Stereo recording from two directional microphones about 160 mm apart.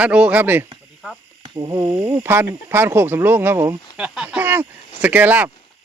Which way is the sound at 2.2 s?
15° right (ahead or behind).